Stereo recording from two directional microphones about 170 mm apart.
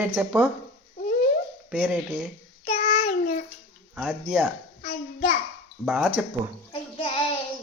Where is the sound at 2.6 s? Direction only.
40° left (ahead or behind).